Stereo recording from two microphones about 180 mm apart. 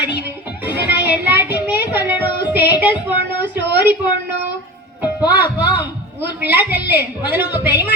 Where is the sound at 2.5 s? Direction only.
10° right (ahead or behind).